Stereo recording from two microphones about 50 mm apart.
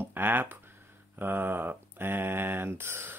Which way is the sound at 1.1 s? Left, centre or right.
Right.